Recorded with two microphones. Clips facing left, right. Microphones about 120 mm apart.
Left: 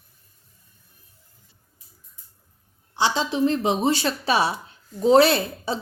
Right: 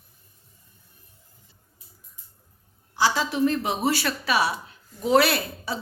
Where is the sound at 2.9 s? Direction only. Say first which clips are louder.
Left 1 dB; 25° left (ahead or behind).